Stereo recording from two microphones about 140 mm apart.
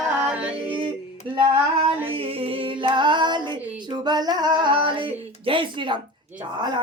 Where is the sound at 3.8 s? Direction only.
30° right (ahead or behind).